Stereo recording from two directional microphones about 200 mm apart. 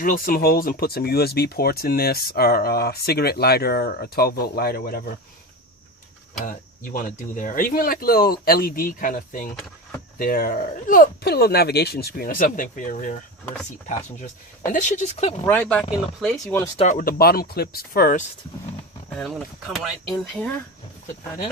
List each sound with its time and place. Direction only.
0.0 s speech: 45° left (ahead or behind)
6.4 s speech: 40° left (ahead or behind)
14.7 s speech: 40° left (ahead or behind)
15.4 s speech: 5° left (ahead or behind)
17.0 s speech: 50° left (ahead or behind)
19.1 s speech: centre (ahead or behind)